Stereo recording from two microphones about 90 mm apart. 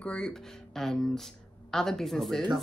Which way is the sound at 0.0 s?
10° left (ahead or behind).